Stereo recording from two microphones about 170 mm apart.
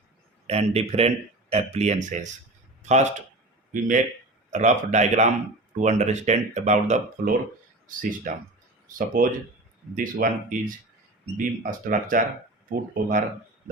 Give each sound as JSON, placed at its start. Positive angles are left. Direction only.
{"t": 0.4, "sound": "speech", "side_deg": -35}